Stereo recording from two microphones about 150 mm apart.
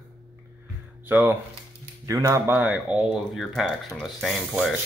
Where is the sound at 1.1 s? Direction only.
10° right (ahead or behind).